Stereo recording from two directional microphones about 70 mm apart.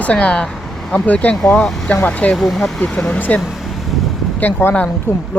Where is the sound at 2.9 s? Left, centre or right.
Centre.